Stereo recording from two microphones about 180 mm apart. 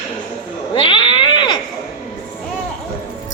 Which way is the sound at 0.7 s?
30° left (ahead or behind).